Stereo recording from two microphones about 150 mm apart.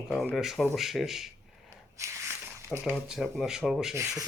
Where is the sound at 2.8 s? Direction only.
Centre (ahead or behind).